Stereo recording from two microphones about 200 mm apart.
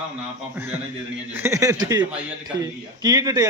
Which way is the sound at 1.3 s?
10° right (ahead or behind).